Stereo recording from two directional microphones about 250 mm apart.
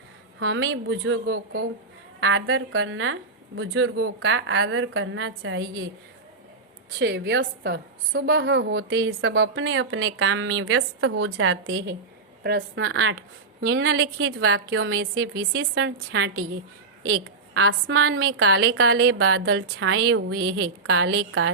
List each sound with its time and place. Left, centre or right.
0.3 s a woman's voice: right
7.0 s a woman's voice: right
11.6 s a woman's voice: right